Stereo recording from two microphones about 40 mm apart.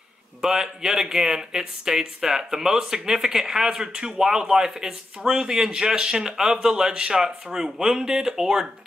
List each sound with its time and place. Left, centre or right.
0.4 s speech: centre